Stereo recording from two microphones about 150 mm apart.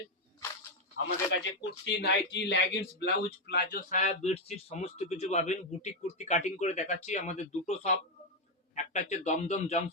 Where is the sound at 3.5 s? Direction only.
85° left.